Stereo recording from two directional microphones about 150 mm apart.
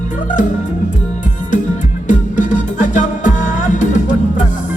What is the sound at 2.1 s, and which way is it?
Music, 55° left (ahead or behind).